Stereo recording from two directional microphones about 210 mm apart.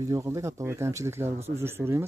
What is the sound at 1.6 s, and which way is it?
Speech, 10° right (ahead or behind).